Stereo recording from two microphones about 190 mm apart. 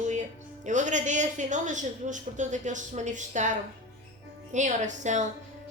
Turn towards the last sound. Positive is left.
turn(degrees=-40)  # may be behind; listen again after turning